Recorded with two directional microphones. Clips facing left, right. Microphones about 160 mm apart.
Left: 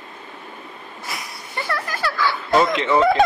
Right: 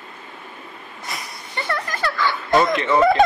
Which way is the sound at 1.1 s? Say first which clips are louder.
Even; centre (ahead or behind).